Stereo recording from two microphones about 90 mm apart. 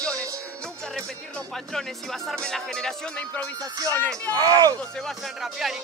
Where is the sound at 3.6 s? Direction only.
40° right (ahead or behind).